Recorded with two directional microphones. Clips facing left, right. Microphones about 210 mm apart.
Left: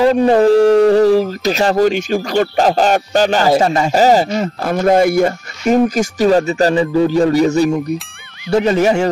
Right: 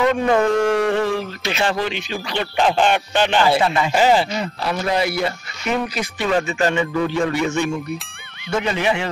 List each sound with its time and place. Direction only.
0.0 s speech: 35° left (ahead or behind)